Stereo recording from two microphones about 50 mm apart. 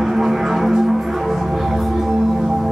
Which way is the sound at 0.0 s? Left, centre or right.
Centre.